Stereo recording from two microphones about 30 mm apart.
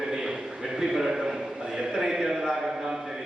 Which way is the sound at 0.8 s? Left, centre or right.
Centre.